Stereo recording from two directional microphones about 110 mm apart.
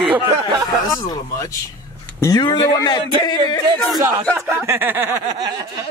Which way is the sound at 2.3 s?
40° left (ahead or behind).